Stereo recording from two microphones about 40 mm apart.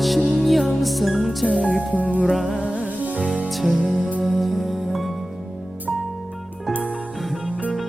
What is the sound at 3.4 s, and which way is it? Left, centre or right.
Music, centre.